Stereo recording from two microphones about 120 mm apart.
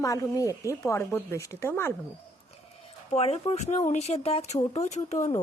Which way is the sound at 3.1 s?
60° left (ahead or behind).